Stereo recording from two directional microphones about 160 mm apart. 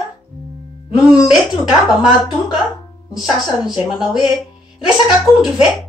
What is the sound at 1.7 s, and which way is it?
Speech, 5° right (ahead or behind).